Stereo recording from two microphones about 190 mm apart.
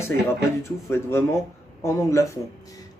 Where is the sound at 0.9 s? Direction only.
15° left (ahead or behind).